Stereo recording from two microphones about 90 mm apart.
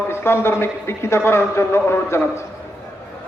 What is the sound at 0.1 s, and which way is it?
A man's voice, 25° left (ahead or behind).